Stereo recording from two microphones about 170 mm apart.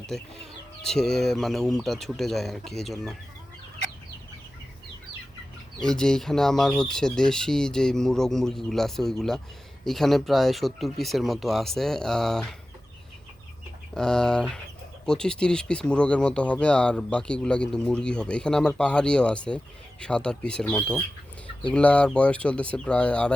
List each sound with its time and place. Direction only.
0.1 s speech: 5° left (ahead or behind)
5.8 s speech: 5° left (ahead or behind)
13.9 s speech: 5° left (ahead or behind)